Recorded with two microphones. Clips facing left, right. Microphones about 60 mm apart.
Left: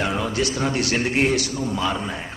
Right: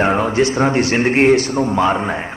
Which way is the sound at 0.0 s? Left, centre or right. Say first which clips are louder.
Right 8 dB; right.